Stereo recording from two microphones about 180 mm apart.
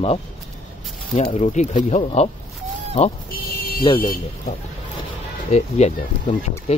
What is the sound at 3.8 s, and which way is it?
Speech, 25° left (ahead or behind).